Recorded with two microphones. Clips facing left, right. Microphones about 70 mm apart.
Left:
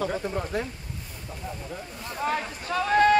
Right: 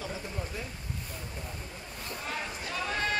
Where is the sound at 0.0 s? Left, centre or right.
Left.